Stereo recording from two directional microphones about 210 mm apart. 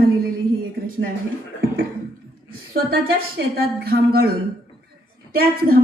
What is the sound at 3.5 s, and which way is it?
Speech, 45° right (ahead or behind).